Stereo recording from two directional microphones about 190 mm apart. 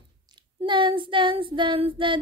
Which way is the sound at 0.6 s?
25° right (ahead or behind).